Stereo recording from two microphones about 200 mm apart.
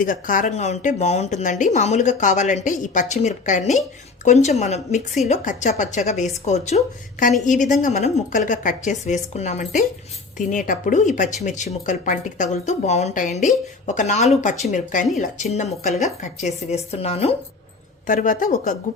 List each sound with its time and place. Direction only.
0.0 s a woman's voice: 40° left (ahead or behind)